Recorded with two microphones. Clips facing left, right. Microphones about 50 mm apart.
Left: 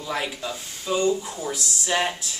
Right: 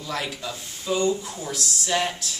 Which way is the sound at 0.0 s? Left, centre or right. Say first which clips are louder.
Left 2 dB; centre.